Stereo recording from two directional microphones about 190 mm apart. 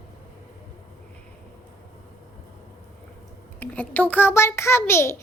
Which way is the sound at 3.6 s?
10° left (ahead or behind).